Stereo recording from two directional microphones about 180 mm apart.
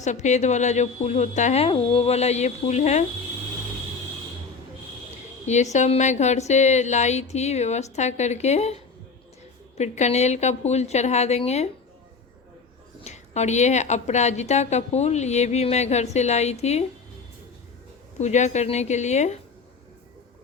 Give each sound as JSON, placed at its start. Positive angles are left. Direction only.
{"t": 0.0, "sound": "a woman's voice", "side_deg": 40}
{"t": 5.7, "sound": "a woman's voice", "side_deg": 40}
{"t": 13.1, "sound": "a woman's voice", "side_deg": 40}
{"t": 18.2, "sound": "a woman's voice", "side_deg": 40}